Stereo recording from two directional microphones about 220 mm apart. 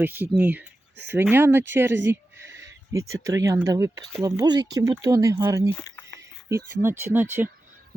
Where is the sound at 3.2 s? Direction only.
15° right (ahead or behind).